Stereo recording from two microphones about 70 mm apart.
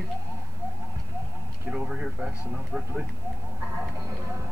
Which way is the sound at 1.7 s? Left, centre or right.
Centre.